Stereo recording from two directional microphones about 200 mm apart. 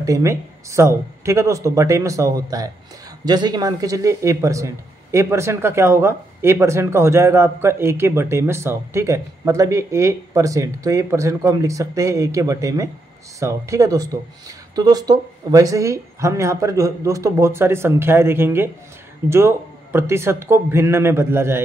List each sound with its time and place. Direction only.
0.0 s speech: 15° right (ahead or behind)